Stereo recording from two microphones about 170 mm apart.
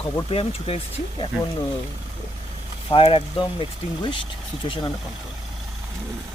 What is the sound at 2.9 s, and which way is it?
Speech, 30° left (ahead or behind).